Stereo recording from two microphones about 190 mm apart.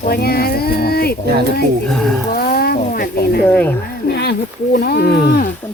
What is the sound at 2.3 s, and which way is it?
Speech, 50° left (ahead or behind).